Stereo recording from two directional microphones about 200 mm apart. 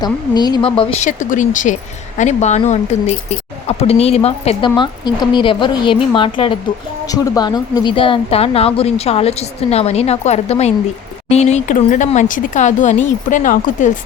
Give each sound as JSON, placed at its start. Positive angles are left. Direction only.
{"t": 0.0, "sound": "speech", "side_deg": 20}